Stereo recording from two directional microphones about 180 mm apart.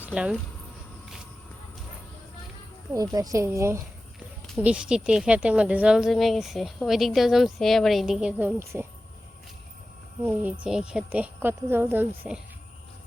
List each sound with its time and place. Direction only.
0.0 s speech: 5° right (ahead or behind)
2.9 s speech: 20° right (ahead or behind)
4.4 s speech: centre (ahead or behind)
10.2 s speech: 10° right (ahead or behind)